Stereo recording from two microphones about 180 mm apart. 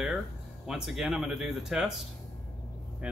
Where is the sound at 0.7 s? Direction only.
Centre (ahead or behind).